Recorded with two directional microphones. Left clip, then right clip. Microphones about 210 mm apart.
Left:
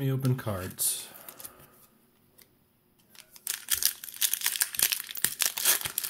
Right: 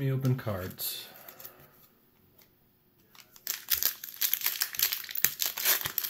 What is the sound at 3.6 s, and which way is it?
Crumpling, 5° left (ahead or behind).